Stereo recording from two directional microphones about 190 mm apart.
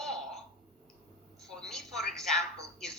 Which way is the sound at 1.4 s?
Centre (ahead or behind).